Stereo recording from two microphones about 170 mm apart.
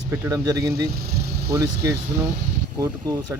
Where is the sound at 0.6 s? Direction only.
65° right (ahead or behind).